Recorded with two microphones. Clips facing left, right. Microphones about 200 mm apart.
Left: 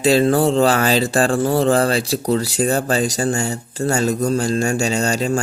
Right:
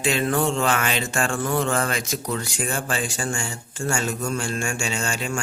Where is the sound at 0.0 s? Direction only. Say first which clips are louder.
Left 8 dB; 35° left (ahead or behind).